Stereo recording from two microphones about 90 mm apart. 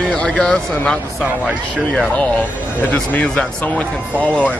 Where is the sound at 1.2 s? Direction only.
15° right (ahead or behind).